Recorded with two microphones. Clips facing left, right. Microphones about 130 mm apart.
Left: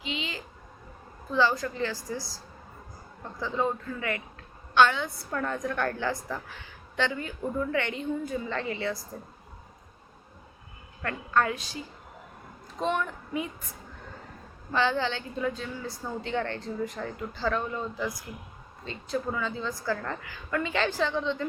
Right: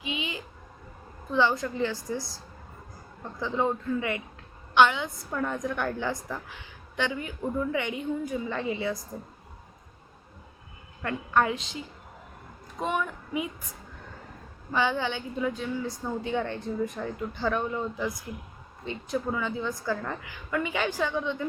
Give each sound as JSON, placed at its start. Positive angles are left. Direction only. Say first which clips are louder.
{"t": 0.0, "sound": "a sound", "louder": "right 1 dB", "side_deg": -15}
{"t": 1.3, "sound": "a woman's voice", "louder": "even", "side_deg": -20}
{"t": 3.4, "sound": "a woman's voice", "louder": "right 1 dB", "side_deg": -20}
{"t": 4.7, "sound": "a woman's voice", "louder": "right 1 dB", "side_deg": -15}
{"t": 11.0, "sound": "a woman's voice", "louder": "right 1 dB", "side_deg": -15}
{"t": 12.8, "sound": "speech", "louder": "left 1 dB", "side_deg": -10}
{"t": 14.7, "sound": "a woman's voice", "louder": "even", "side_deg": -10}